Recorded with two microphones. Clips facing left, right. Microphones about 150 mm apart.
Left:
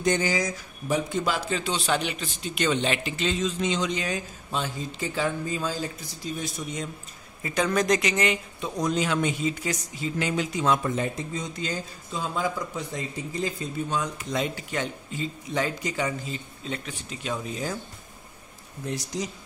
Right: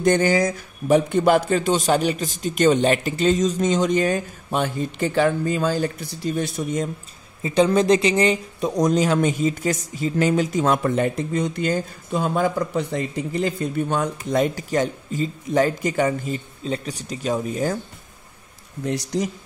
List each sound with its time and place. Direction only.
0.0 s speech: 55° right (ahead or behind)
7.4 s speech: 25° right (ahead or behind); by 16.3 s 50° right (ahead or behind)
16.6 s speech: 35° right (ahead or behind)
18.9 s speech: 70° right (ahead or behind)